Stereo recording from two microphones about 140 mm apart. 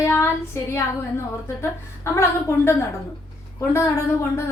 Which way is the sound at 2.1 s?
20° left (ahead or behind).